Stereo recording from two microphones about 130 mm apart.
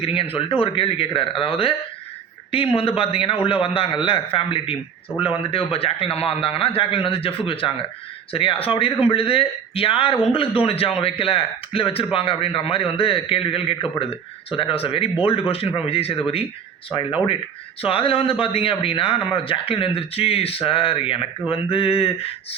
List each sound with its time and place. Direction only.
0.0 s speech: 45° left (ahead or behind)